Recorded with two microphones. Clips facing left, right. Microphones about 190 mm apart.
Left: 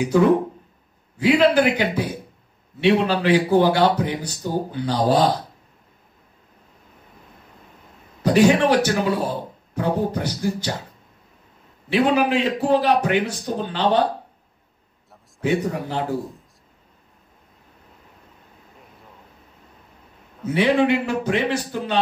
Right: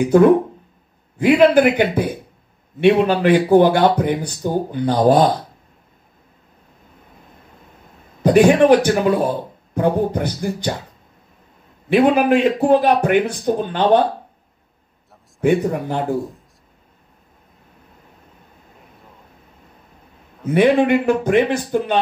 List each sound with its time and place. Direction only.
0.0 s a man's voice: 55° right (ahead or behind)
3.2 s speech: 55° right (ahead or behind)
8.2 s a man's voice: 55° right (ahead or behind)
11.9 s speech: 55° right (ahead or behind)
15.4 s speech: 55° right (ahead or behind)
20.5 s speech: 50° right (ahead or behind)